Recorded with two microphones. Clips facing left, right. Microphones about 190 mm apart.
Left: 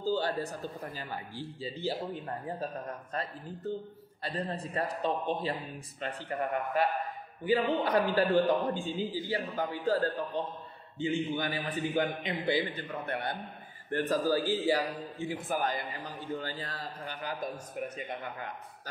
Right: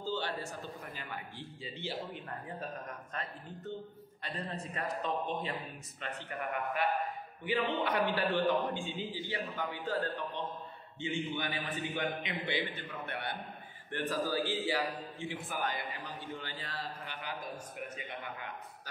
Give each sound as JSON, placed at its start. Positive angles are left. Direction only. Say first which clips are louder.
{"t": 0.0, "sound": "speech", "louder": "left 6 dB", "side_deg": 40}